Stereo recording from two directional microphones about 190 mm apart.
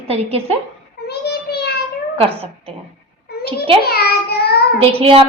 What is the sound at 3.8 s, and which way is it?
Child singing, 55° left (ahead or behind).